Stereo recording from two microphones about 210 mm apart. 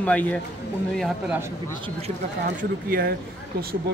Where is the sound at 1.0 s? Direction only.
5° right (ahead or behind).